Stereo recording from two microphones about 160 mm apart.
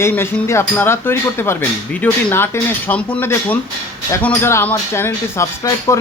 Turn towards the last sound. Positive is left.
turn(degrees=20)  # may be behind; listen again after turning